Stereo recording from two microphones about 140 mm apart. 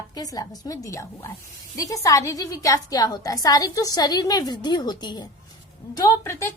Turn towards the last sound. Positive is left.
turn(degrees=20)  # may be behind; listen again after turning